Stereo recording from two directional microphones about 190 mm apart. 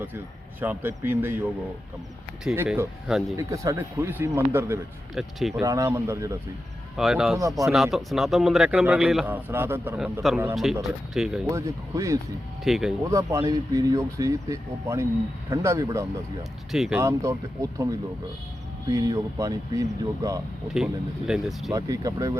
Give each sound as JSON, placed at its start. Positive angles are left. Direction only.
{"t": 0.6, "sound": "a man's voice", "side_deg": -10}
{"t": 3.3, "sound": "speech", "side_deg": -15}
{"t": 5.1, "sound": "a man's voice", "side_deg": 0}
{"t": 5.5, "sound": "speech", "side_deg": -15}
{"t": 6.9, "sound": "a man's voice", "side_deg": 0}
{"t": 11.4, "sound": "speech", "side_deg": -15}
{"t": 12.6, "sound": "a man's voice", "side_deg": 0}
{"t": 13.1, "sound": "speech", "side_deg": -15}
{"t": 16.7, "sound": "a man's voice", "side_deg": 0}
{"t": 17.0, "sound": "speech", "side_deg": -15}
{"t": 18.9, "sound": "speech", "side_deg": -20}
{"t": 20.7, "sound": "a man's voice", "side_deg": 0}
{"t": 21.7, "sound": "speech", "side_deg": -15}